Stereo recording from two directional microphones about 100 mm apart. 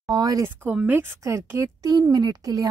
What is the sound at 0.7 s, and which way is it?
Speech, 15° right (ahead or behind).